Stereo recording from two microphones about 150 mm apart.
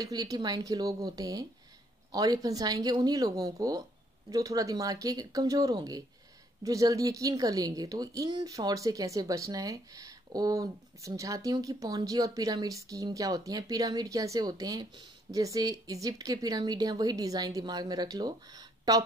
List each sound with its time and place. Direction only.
0.0 s speech: 25° right (ahead or behind)